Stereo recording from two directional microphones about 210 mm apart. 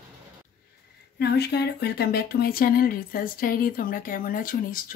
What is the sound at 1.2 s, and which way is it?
Speech, 50° left (ahead or behind).